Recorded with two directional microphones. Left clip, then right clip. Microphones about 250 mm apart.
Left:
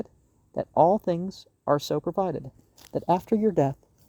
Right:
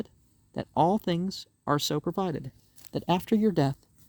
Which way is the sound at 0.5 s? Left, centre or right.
Right.